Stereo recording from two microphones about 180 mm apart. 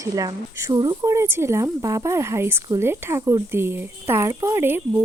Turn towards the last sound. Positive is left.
turn(degrees=-10)  # may be behind; listen again after turning